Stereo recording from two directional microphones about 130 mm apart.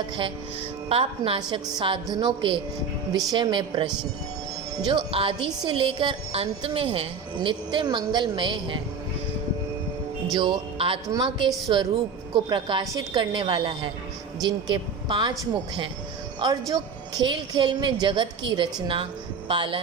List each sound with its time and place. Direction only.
0.9 s a woman's voice: 45° right (ahead or behind)
1.4 s music: 40° right (ahead or behind)
4.9 s music: 40° right (ahead or behind)
10.3 s music: 40° right (ahead or behind)
16.4 s music: 30° right (ahead or behind)